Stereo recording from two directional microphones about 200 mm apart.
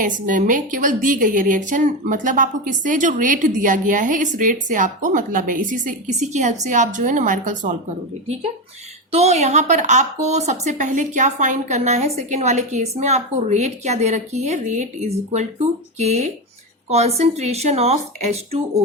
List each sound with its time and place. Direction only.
0.0 s a woman's voice: 40° right (ahead or behind)
9.1 s a woman's voice: 35° right (ahead or behind)